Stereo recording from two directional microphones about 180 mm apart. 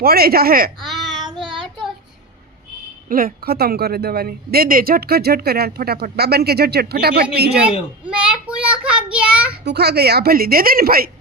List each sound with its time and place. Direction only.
0.0 s speech: 60° right (ahead or behind)
0.8 s child singing: centre (ahead or behind)
3.1 s speech: 55° right (ahead or behind)
8.0 s child singing: 5° right (ahead or behind)
9.6 s speech: 65° right (ahead or behind)